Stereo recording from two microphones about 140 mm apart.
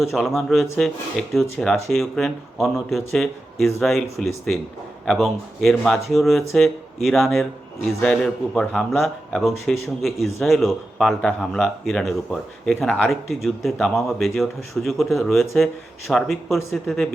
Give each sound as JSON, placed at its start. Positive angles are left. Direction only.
{"t": 0.1, "sound": "speech", "side_deg": 0}